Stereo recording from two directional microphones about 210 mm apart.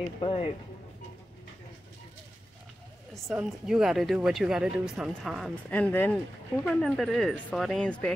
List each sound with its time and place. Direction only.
0.2 s speech: 30° left (ahead or behind)
3.3 s speech: centre (ahead or behind)